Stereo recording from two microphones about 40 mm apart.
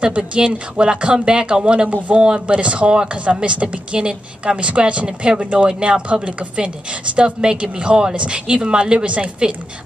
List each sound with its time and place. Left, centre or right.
0.0 s a woman's voice: right
9.1 s a woman's voice: right